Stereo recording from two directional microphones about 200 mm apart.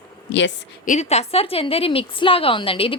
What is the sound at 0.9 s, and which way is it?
A woman's voice, 35° left (ahead or behind).